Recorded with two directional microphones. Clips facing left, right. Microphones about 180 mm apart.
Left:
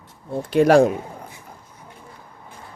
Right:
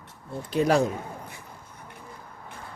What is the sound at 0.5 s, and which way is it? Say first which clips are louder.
Speech: left 8 dB; 80° left.